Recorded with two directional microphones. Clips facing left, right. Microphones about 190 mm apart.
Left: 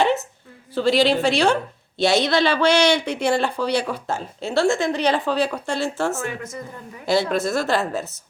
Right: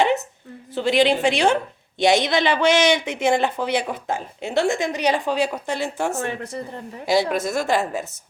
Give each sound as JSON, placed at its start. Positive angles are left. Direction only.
{"t": 0.8, "sound": "a woman's voice", "side_deg": -20}
{"t": 6.1, "sound": "speech", "side_deg": -35}
{"t": 7.0, "sound": "speech", "side_deg": -15}